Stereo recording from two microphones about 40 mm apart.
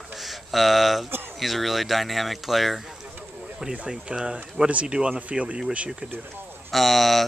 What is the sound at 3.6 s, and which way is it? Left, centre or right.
Speech, centre.